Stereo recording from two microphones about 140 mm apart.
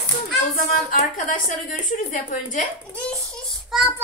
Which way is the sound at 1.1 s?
65° left (ahead or behind).